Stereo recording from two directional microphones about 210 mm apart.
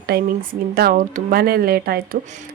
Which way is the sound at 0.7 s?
45° right (ahead or behind).